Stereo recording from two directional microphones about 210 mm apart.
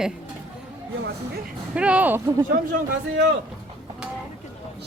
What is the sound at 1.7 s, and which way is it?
Speech, 5° right (ahead or behind).